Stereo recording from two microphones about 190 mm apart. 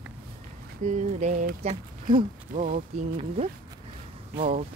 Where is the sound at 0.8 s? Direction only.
40° right (ahead or behind).